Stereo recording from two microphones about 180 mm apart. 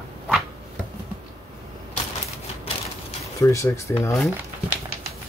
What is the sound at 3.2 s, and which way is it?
Speech, 15° left (ahead or behind).